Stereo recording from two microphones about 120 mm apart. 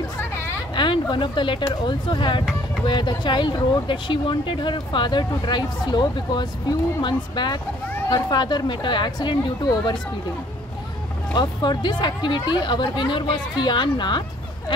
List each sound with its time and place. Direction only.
0.7 s speech: 40° left (ahead or behind)
11.3 s speech: 35° left (ahead or behind)